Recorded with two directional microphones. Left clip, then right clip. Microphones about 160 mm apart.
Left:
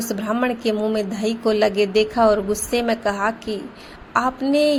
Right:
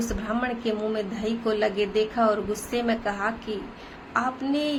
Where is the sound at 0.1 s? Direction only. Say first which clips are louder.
Left 6 dB; 45° left (ahead or behind).